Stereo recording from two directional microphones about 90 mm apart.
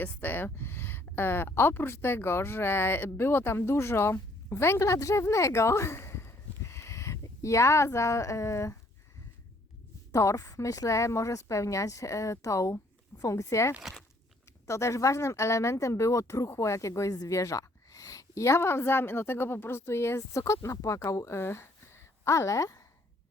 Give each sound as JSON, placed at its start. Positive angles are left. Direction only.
{"t": 0.0, "sound": "speech", "side_deg": 20}
{"t": 10.1, "sound": "speech", "side_deg": 35}